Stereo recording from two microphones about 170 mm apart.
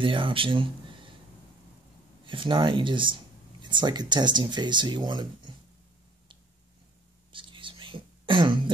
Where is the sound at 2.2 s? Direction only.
30° right (ahead or behind).